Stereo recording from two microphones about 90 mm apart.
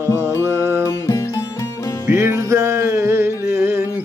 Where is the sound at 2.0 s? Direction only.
30° right (ahead or behind).